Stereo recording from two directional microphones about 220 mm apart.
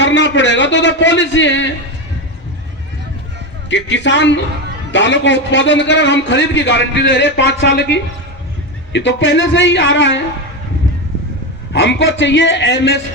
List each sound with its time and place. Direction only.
0.0 s a man's voice: 55° left (ahead or behind)
3.7 s a man's voice: 55° left (ahead or behind)
11.7 s a man's voice: 55° left (ahead or behind)